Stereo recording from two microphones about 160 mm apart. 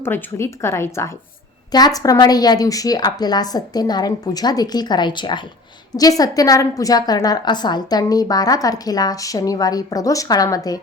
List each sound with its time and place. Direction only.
0.0 s a woman's voice: 15° left (ahead or behind)